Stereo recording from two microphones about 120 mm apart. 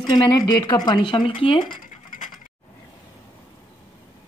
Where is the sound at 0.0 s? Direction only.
40° left (ahead or behind).